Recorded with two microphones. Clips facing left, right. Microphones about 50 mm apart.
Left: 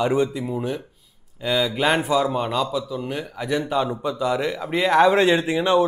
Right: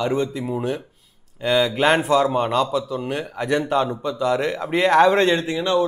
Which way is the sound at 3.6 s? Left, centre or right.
Centre.